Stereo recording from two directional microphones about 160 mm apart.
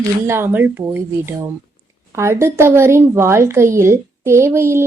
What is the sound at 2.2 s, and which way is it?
A woman's voice, 15° right (ahead or behind).